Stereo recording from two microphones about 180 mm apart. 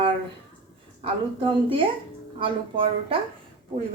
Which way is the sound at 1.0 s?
30° right (ahead or behind).